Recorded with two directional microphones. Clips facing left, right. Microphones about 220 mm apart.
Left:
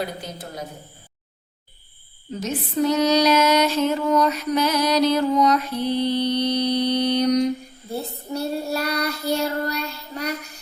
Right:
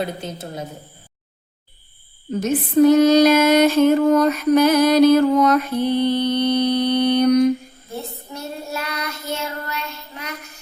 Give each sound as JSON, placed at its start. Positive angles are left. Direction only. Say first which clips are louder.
{"t": 0.2, "sound": "a woman's voice", "louder": "right 4 dB", "side_deg": -25}
{"t": 2.4, "sound": "female singing", "louder": "right 8 dB", "side_deg": -50}
{"t": 7.9, "sound": "child singing", "louder": "left 4 dB", "side_deg": 35}